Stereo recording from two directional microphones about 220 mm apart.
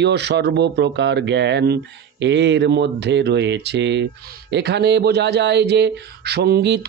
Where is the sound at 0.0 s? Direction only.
50° right (ahead or behind).